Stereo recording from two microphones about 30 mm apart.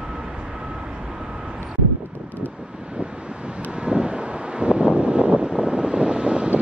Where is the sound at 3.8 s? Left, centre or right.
Right.